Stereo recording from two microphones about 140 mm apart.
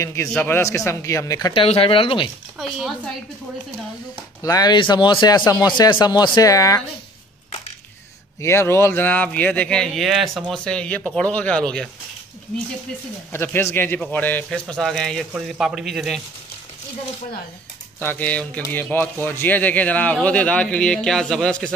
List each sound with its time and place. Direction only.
0.0 s speech: 20° left (ahead or behind)
1.5 s speech: 40° left (ahead or behind)
4.4 s speech: 25° left (ahead or behind)
8.4 s speech: 20° left (ahead or behind)
13.3 s speech: 15° left (ahead or behind); by 16.2 s centre (ahead or behind)
17.9 s speech: 10° left (ahead or behind)